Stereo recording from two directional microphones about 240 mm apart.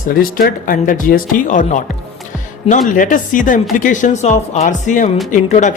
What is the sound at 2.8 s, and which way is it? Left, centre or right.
A woman's voice, left.